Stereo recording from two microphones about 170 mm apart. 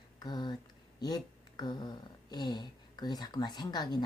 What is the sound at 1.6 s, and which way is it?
A woman's voice, 25° left (ahead or behind).